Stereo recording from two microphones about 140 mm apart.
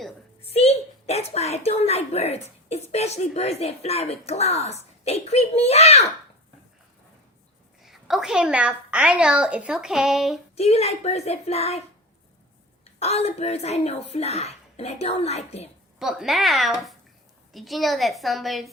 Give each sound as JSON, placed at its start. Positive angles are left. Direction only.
{"t": 0.4, "sound": "a woman's voice", "side_deg": 45}
{"t": 7.8, "sound": "a woman's voice", "side_deg": 0}
{"t": 10.5, "sound": "speech", "side_deg": 50}
{"t": 13.0, "sound": "speech", "side_deg": 50}
{"t": 16.0, "sound": "a woman's voice", "side_deg": 0}